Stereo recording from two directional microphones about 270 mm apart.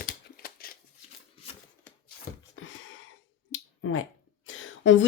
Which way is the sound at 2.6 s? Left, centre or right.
Left.